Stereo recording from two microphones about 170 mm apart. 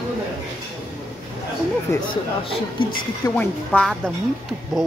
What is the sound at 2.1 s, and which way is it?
A woman's voice, 30° left (ahead or behind).